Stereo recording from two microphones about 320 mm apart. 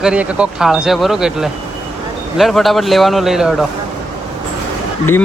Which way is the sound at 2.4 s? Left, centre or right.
Centre.